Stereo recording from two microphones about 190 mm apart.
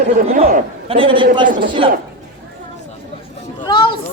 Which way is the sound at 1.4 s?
45° right (ahead or behind).